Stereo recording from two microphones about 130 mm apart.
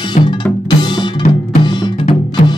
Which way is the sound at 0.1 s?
35° left (ahead or behind).